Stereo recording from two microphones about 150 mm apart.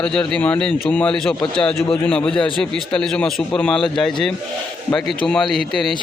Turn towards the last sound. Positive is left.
turn(degrees=0)  # may be behind; listen again after turning